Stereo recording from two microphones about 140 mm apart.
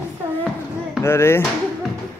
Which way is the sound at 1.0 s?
20° left (ahead or behind).